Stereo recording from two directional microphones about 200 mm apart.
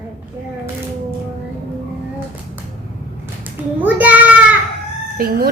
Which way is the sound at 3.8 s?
10° right (ahead or behind).